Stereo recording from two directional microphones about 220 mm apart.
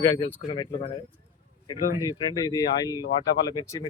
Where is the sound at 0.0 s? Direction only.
15° left (ahead or behind).